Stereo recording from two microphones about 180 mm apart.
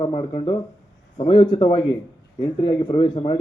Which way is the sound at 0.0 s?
30° left (ahead or behind).